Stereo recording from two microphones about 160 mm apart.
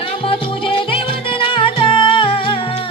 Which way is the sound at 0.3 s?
35° left (ahead or behind).